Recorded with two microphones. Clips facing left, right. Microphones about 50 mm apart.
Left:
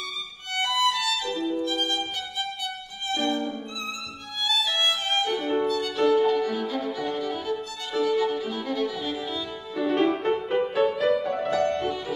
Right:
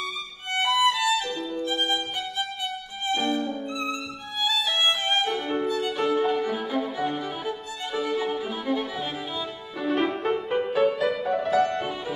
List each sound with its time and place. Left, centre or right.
0.5 s violin: centre
1.3 s music: centre
1.7 s music: centre
3.2 s violin: centre
9.8 s music: centre